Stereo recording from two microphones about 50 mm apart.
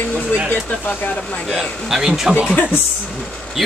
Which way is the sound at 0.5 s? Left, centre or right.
Left.